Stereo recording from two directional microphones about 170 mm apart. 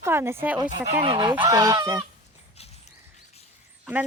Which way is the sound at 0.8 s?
35° right (ahead or behind).